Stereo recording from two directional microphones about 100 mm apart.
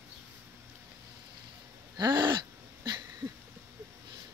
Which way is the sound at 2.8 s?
40° right (ahead or behind).